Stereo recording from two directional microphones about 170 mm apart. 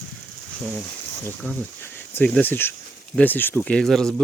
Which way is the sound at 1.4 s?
10° left (ahead or behind).